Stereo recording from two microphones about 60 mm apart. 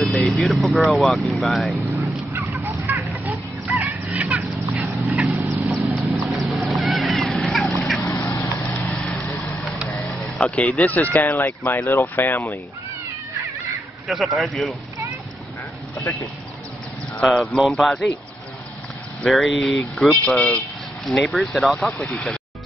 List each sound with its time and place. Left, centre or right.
0.0 s speech: centre
2.5 s a sound: right
3.7 s fowl: right
5.1 s a sound: right
5.7 s horse: centre
7.3 s duck: centre
8.0 s a sound: left
10.0 s vehicle: centre
10.4 s speech: centre; by 12.5 s left
14.0 s speech: centre
17.2 s speech: centre
19.2 s speech: centre
20.2 s speech: centre
21.0 s speech: centre